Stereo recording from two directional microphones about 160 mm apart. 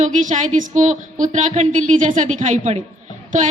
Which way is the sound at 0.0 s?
50° right (ahead or behind).